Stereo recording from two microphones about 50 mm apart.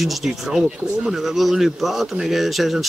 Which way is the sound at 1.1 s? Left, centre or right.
Centre.